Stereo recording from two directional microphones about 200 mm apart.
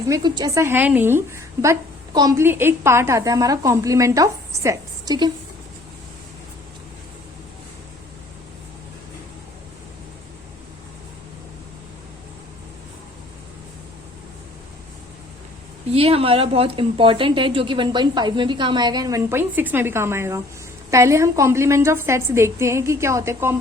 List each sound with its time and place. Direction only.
0.1 s a woman's voice: 20° right (ahead or behind)
15.9 s a woman's voice: 30° right (ahead or behind); by 23.6 s 15° right (ahead or behind)